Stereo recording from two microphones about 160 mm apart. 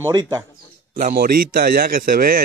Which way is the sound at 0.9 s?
60° right (ahead or behind).